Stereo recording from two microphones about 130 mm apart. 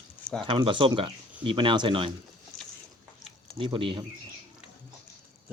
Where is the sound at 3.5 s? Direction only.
40° right (ahead or behind).